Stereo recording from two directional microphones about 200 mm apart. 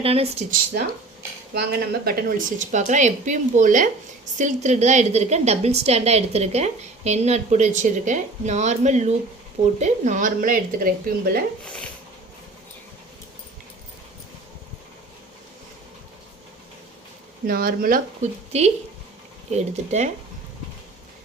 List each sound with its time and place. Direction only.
0.0 s speech: 30° right (ahead or behind)
1.5 s a woman's voice: 50° right (ahead or behind)
11.6 s speech: 5° left (ahead or behind)
17.4 s speech: 50° right (ahead or behind)
18.5 s a woman's voice: 30° right (ahead or behind)